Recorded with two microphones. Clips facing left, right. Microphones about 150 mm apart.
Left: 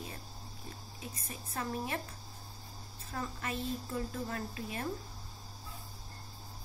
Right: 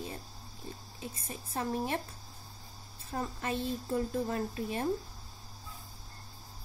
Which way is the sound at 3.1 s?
30° right (ahead or behind).